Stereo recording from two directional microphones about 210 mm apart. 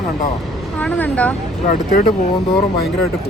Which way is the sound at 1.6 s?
40° left (ahead or behind).